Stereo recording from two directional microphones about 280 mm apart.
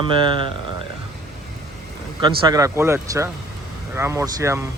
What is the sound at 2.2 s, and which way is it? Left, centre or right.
Speech, centre.